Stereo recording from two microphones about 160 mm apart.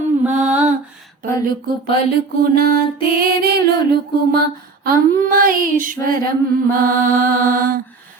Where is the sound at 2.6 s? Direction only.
70° right (ahead or behind).